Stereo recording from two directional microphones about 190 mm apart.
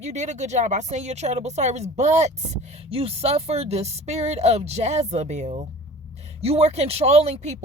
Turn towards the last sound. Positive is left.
turn(degrees=-35)  # may be behind; listen again after turning